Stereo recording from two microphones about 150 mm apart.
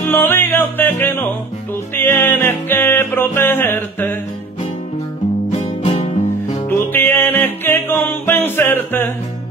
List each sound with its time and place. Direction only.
0.1 s music: 15° left (ahead or behind)
5.5 s music: 50° left (ahead or behind)
6.9 s music: 15° left (ahead or behind)